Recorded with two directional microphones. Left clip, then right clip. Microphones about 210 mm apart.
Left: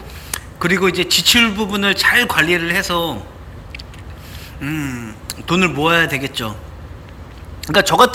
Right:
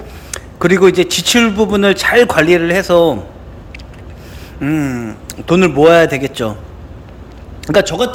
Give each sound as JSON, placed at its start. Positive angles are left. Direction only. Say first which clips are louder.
{"t": 0.3, "sound": "speech", "louder": "right 5 dB", "side_deg": -15}
{"t": 4.6, "sound": "speech", "louder": "right 7 dB", "side_deg": -15}
{"t": 7.6, "sound": "a man's voice", "louder": "right 2 dB", "side_deg": -10}